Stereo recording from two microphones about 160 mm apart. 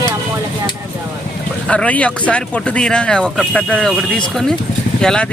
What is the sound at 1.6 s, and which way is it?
Speech, 5° left (ahead or behind).